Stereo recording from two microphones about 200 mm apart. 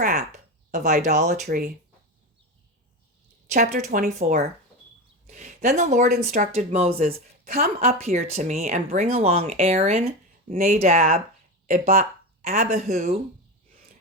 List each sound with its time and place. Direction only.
0.0 s a sound: 40° right (ahead or behind)
1.5 s speech: 50° right (ahead or behind)
3.5 s speech: 40° right (ahead or behind)
7.4 s a woman's voice: 50° right (ahead or behind)
7.8 s speech: 35° right (ahead or behind)